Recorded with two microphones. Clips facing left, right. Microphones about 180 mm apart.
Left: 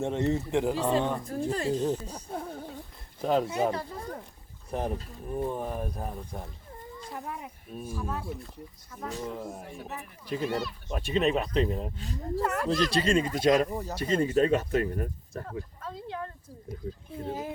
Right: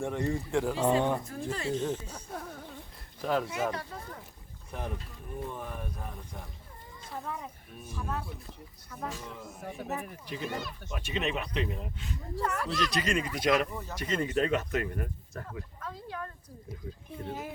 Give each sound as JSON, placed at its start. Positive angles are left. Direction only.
{"t": 0.0, "sound": "speech", "side_deg": 20}
{"t": 0.9, "sound": "speech", "side_deg": -15}
{"t": 1.2, "sound": "speech", "side_deg": 35}
{"t": 7.3, "sound": "speech", "side_deg": 15}
{"t": 7.9, "sound": "speech", "side_deg": 5}
{"t": 9.1, "sound": "speech", "side_deg": 40}
{"t": 10.5, "sound": "speech", "side_deg": -50}
{"t": 10.9, "sound": "speech", "side_deg": 35}